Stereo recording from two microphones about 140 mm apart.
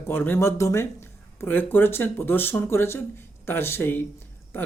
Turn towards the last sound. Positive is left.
turn(degrees=15)  # may be behind; listen again after turning